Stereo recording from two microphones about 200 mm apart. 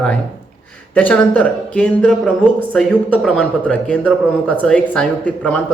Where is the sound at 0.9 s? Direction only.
10° left (ahead or behind).